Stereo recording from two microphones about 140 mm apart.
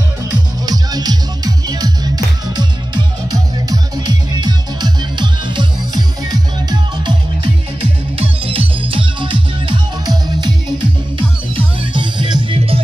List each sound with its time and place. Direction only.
0.7 s music: 30° right (ahead or behind)
7.8 s music: 40° right (ahead or behind)